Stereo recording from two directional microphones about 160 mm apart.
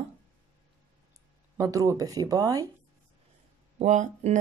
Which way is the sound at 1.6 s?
20° right (ahead or behind).